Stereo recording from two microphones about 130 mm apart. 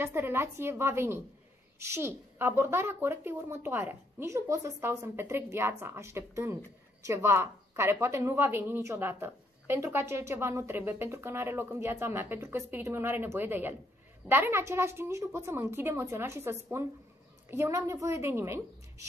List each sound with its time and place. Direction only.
0.0 s a woman's voice: 15° right (ahead or behind)